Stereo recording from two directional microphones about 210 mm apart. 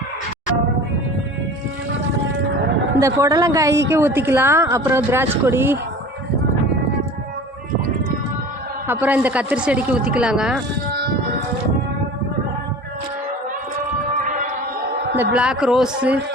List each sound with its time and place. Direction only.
3.0 s a woman's voice: 15° right (ahead or behind)
8.9 s speech: 10° right (ahead or behind)
14.2 s a sound: 40° right (ahead or behind)
15.1 s speech: 10° right (ahead or behind)